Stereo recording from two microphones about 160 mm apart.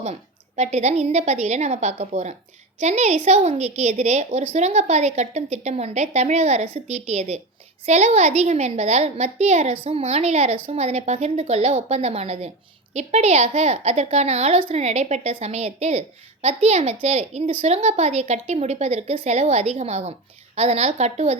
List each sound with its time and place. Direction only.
0.0 s a woman's voice: 45° right (ahead or behind)